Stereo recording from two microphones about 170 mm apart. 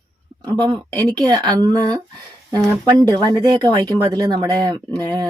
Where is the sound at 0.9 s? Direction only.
25° right (ahead or behind).